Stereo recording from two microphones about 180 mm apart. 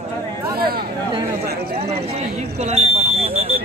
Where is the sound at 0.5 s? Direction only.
60° right (ahead or behind).